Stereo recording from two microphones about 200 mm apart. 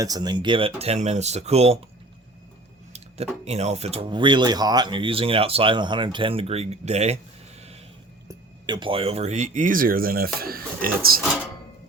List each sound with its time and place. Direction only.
0.0 s speech: 20° right (ahead or behind)
2.9 s speech: 30° right (ahead or behind)
8.3 s speech: 20° right (ahead or behind); by 11.2 s 50° right (ahead or behind)